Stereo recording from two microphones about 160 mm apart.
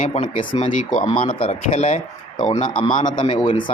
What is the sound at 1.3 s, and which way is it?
Speech, 35° left (ahead or behind).